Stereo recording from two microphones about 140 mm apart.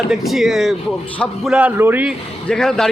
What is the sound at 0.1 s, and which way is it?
A man's voice, centre (ahead or behind).